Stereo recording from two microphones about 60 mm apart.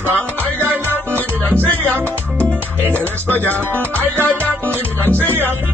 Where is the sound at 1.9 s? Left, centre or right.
Right.